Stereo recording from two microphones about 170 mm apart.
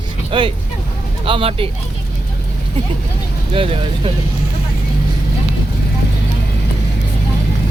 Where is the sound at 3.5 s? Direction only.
35° right (ahead or behind).